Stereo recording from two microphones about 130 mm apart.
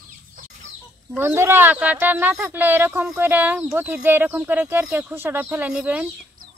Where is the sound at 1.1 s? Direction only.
15° right (ahead or behind).